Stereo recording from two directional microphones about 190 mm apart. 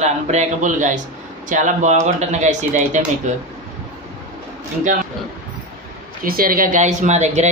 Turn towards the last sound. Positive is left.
turn(degrees=-35)  # may be behind; listen again after turning